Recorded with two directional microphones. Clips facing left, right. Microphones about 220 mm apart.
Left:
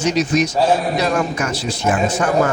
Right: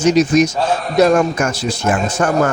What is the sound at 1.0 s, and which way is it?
A man's voice, 50° right (ahead or behind).